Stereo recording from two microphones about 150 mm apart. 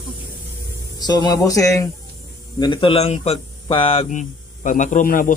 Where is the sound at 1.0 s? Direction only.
25° left (ahead or behind).